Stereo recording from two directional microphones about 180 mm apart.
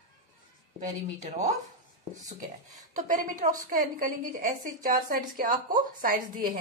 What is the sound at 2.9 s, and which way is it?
A woman's voice, 45° right (ahead or behind).